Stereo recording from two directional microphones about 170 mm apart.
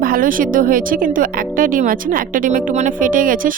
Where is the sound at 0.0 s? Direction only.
55° right (ahead or behind).